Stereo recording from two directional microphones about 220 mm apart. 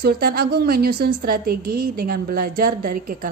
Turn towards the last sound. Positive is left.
turn(degrees=-40)  # may be behind; listen again after turning